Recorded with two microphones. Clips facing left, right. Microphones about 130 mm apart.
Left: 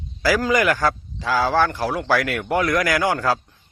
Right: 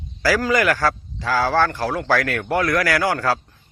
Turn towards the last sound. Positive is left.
turn(degrees=15)  # may be behind; listen again after turning